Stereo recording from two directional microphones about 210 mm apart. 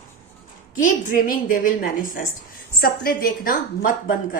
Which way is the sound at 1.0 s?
40° left (ahead or behind).